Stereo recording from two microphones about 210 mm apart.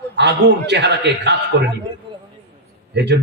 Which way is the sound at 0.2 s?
55° right (ahead or behind).